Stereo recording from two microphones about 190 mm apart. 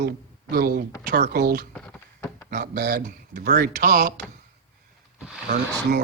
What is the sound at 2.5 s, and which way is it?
Speech, 55° right (ahead or behind).